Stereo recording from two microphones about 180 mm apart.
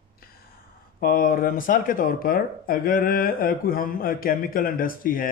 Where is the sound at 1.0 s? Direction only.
55° left (ahead or behind).